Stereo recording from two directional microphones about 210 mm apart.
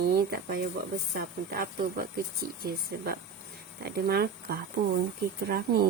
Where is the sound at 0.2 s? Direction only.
50° right (ahead or behind).